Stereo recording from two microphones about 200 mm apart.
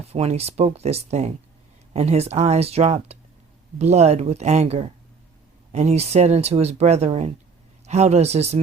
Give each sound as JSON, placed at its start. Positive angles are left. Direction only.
{"t": 0.1, "sound": "speech", "side_deg": -30}